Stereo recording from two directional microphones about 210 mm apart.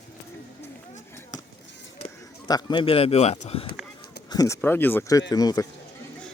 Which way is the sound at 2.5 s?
20° left (ahead or behind).